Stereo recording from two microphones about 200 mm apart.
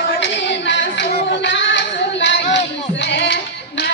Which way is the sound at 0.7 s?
60° left (ahead or behind).